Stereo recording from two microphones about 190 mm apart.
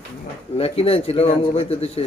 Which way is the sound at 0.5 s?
30° left (ahead or behind).